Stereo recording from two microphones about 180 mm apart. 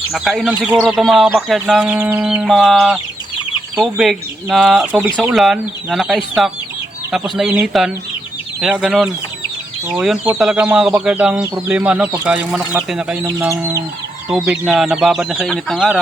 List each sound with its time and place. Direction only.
0.1 s speech: centre (ahead or behind)
13.5 s chicken: 15° right (ahead or behind)
14.3 s speech: 5° right (ahead or behind)